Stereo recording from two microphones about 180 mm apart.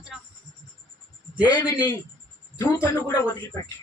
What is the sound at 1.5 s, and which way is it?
A man's voice, 25° left (ahead or behind).